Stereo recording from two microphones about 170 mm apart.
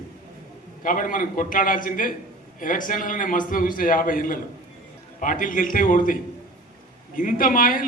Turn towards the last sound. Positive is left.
turn(degrees=55)  # may be behind; listen again after turning